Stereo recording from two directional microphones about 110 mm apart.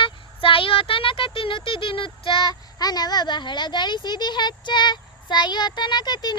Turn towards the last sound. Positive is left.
turn(degrees=40)  # may be behind; listen again after turning